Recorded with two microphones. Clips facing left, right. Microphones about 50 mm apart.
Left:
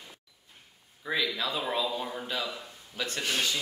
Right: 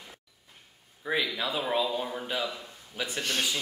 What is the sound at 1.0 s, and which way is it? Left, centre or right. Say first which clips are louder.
Speech: right 1 dB; centre.